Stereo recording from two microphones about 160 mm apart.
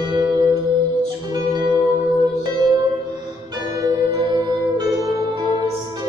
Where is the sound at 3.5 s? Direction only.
25° right (ahead or behind).